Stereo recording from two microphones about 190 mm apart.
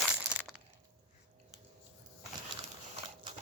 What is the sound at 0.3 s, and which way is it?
Crushing, 5° right (ahead or behind).